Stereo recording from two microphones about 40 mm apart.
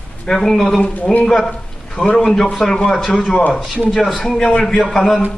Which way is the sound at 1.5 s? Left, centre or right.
Centre.